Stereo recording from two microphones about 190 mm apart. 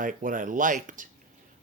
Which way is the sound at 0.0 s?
45° right (ahead or behind).